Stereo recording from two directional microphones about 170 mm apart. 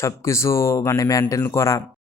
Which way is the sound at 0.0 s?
15° left (ahead or behind).